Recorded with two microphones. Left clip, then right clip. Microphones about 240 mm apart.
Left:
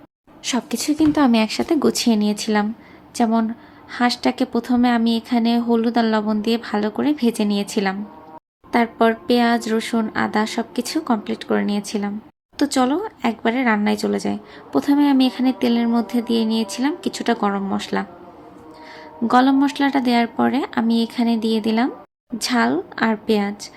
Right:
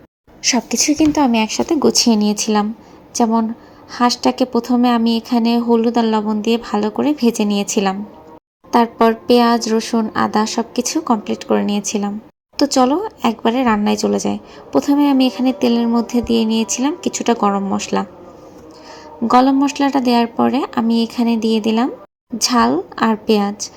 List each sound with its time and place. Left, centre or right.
0.5 s a woman's voice: centre
19.3 s a woman's voice: centre